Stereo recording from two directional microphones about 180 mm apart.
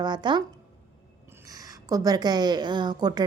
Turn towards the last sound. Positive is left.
turn(degrees=-25)  # may be behind; listen again after turning